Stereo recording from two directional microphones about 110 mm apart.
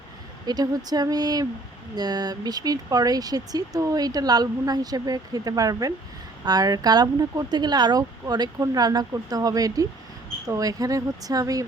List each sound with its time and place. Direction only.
0.4 s speech: 35° right (ahead or behind)